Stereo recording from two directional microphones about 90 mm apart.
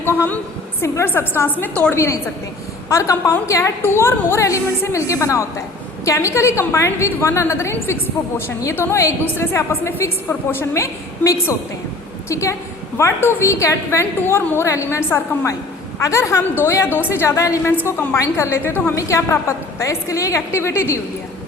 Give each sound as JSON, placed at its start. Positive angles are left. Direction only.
{"t": 0.0, "sound": "a woman's voice", "side_deg": 25}
{"t": 2.0, "sound": "a woman's voice", "side_deg": 30}
{"t": 18.9, "sound": "a woman's voice", "side_deg": 35}